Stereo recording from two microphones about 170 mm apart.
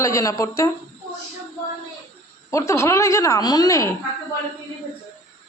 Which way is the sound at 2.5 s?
15° left (ahead or behind).